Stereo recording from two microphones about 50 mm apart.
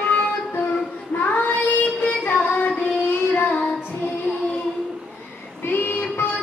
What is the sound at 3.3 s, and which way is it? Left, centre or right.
Child singing, left.